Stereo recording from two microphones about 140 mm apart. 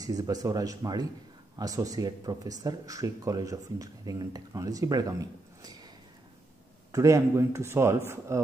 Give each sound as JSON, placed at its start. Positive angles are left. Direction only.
{"t": 0.0, "sound": "speech", "side_deg": -25}
{"t": 6.9, "sound": "speech", "side_deg": -20}